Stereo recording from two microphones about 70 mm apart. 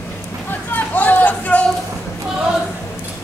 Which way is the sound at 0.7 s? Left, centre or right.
Left.